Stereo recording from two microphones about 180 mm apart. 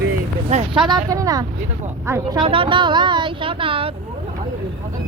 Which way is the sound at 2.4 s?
30° right (ahead or behind).